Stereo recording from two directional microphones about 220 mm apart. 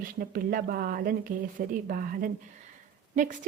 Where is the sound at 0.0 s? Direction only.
40° right (ahead or behind).